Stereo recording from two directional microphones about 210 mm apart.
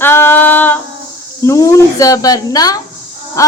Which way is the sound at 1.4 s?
15° left (ahead or behind).